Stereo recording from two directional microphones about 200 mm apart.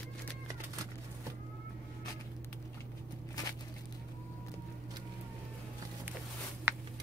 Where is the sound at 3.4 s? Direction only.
20° left (ahead or behind).